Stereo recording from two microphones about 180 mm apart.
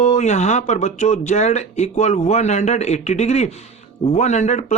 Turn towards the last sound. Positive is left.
turn(degrees=40)  # may be behind; listen again after turning